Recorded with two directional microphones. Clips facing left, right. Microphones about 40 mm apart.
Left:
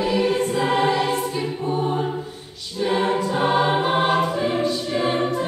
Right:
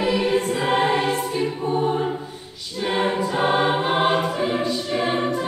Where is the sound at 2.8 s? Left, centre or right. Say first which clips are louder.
Left 1 dB; right.